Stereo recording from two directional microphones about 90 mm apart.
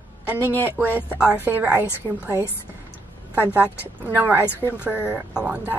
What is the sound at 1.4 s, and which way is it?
Speech, 25° right (ahead or behind).